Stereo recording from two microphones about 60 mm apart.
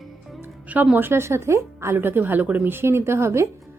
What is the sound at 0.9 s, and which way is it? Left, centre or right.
Speech, right.